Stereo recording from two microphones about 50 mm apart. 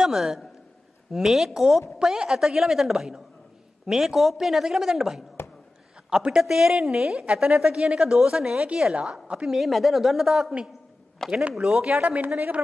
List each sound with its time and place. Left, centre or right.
0.0 s a man's voice: centre
9.5 s speech: centre
11.2 s speech: centre
11.5 s a woman's voice: centre
11.8 s a woman's voice: right